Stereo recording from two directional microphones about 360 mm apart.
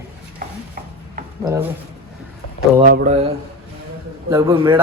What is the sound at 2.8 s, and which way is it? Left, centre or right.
Speech, right.